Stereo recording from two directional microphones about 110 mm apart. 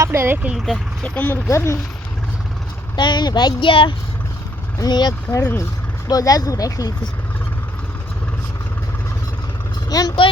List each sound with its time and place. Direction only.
0.0 s speech: 25° right (ahead or behind)
0.4 s speech: centre (ahead or behind)
1.0 s speech: 15° left (ahead or behind)
2.9 s speech: 45° left (ahead or behind)
4.8 s speech: 40° left (ahead or behind)
9.9 s vehicle: 35° left (ahead or behind)